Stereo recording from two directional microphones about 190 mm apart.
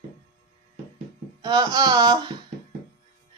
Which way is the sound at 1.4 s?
20° right (ahead or behind).